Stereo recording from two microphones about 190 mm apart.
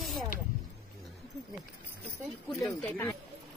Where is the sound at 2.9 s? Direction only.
10° left (ahead or behind).